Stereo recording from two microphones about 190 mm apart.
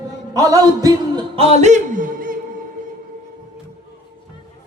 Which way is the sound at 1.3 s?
35° right (ahead or behind).